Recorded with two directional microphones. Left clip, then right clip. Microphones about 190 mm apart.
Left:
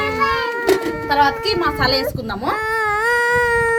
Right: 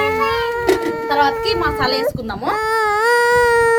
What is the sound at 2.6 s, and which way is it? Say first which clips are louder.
Baby cry: right 3 dB; 75° right (ahead or behind).